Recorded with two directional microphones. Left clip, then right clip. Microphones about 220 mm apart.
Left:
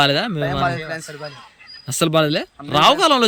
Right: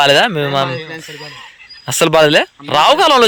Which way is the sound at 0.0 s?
10° left (ahead or behind).